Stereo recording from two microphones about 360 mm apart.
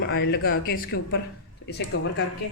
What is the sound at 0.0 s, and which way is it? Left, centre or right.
Speech, left.